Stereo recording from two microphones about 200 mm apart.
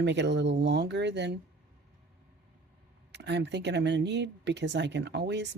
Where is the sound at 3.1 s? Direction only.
60° right (ahead or behind).